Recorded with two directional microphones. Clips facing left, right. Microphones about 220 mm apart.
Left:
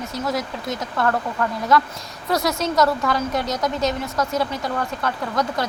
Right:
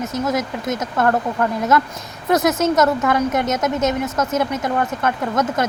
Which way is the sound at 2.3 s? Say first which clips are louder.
Right 5 dB; 20° right (ahead or behind).